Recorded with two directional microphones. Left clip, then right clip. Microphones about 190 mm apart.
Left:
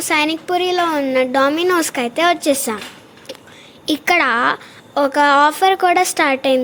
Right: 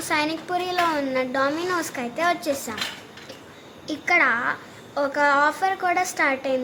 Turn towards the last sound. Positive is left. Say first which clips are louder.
# left 7 dB
turn(degrees=45)  # may be behind; listen again after turning